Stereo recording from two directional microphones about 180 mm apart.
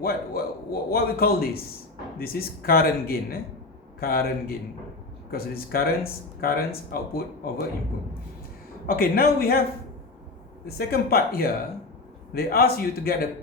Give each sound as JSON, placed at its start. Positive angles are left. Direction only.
{"t": 0.0, "sound": "speech", "side_deg": 55}
{"t": 8.9, "sound": "speech", "side_deg": 55}
{"t": 10.8, "sound": "speech", "side_deg": 60}